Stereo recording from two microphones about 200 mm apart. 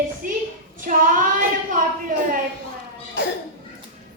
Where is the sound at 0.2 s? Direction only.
40° right (ahead or behind).